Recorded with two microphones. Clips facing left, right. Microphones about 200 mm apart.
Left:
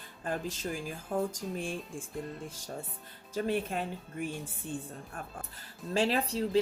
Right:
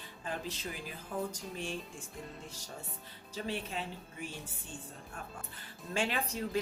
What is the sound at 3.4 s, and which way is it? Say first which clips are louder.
Speech: left 6 dB; 50° left (ahead or behind).